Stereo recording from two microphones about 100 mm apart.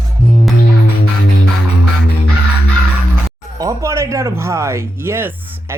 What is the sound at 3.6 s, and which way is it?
Speech, 35° right (ahead or behind).